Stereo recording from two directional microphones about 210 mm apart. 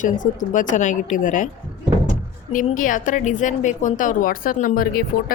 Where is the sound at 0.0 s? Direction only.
35° left (ahead or behind).